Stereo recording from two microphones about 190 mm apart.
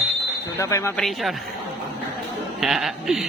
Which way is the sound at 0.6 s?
15° left (ahead or behind).